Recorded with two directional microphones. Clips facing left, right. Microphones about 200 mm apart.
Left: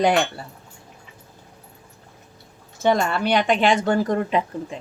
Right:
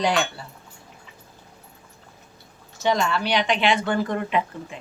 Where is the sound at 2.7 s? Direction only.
50° left (ahead or behind); by 4.8 s 35° left (ahead or behind).